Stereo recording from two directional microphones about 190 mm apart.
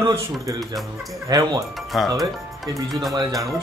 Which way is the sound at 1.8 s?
Centre (ahead or behind).